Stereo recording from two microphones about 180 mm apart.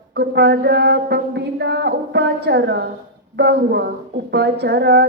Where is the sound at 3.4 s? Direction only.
70° right (ahead or behind).